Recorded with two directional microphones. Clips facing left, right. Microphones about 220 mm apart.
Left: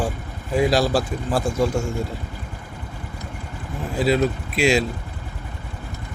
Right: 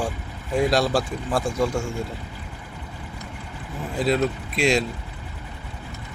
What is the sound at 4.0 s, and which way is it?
Speech, centre (ahead or behind).